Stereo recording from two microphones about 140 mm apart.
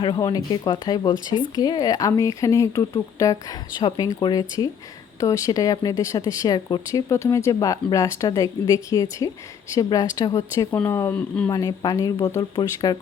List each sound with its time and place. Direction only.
0.2 s speech: 30° left (ahead or behind)
3.8 s speech: 35° left (ahead or behind)